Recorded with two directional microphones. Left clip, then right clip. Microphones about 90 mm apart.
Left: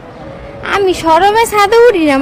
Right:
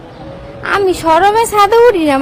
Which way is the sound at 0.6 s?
40° left (ahead or behind).